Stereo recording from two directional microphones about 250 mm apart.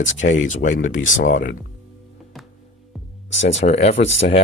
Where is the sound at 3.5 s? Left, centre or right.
Left.